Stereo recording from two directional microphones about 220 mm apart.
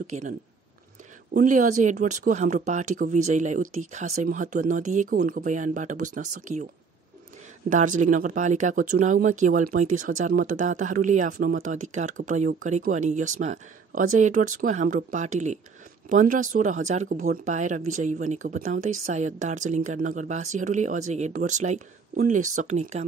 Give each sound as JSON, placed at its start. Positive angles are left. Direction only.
{"t": 0.0, "sound": "speech", "side_deg": -35}
{"t": 1.3, "sound": "speech", "side_deg": -35}
{"t": 7.7, "sound": "speech", "side_deg": -35}